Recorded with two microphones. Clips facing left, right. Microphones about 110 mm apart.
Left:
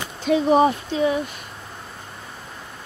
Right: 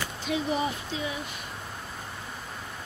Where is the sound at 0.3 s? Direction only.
60° left (ahead or behind).